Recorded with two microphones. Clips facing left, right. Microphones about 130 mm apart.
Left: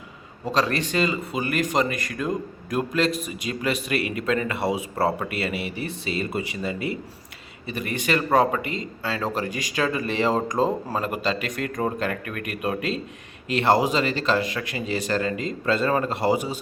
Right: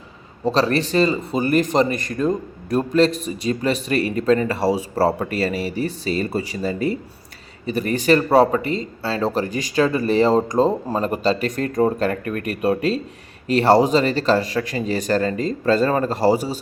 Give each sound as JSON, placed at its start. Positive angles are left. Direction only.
{"t": 0.4, "sound": "speech", "side_deg": -30}